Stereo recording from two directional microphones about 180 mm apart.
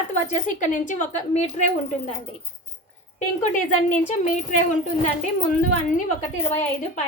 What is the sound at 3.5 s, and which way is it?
Speech, 45° left (ahead or behind).